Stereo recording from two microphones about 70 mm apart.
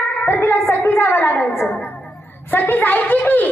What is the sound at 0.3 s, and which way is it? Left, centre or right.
A woman's voice, left.